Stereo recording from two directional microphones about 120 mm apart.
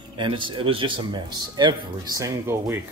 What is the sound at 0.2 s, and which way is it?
A man's voice, 45° right (ahead or behind).